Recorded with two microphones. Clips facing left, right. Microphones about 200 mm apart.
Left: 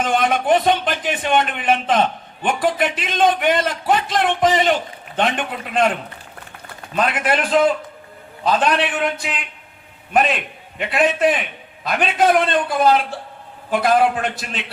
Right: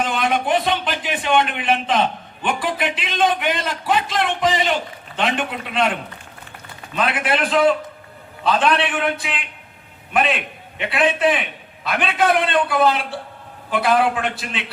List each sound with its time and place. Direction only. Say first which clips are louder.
0.0 s speech: left 2 dB; 45° left (ahead or behind)
6.9 s a man's voice: left 2 dB; 45° left (ahead or behind)